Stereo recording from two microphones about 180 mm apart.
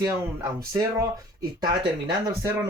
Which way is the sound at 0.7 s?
20° right (ahead or behind).